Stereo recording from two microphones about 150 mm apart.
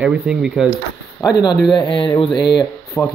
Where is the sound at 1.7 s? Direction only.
30° left (ahead or behind).